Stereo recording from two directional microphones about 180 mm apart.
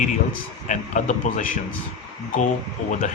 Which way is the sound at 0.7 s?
45° left (ahead or behind).